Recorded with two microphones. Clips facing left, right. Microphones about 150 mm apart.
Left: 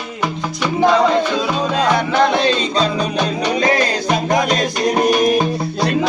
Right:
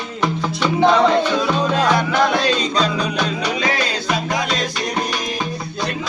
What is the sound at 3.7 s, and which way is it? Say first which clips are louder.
Music: left 4 dB; 45° left (ahead or behind).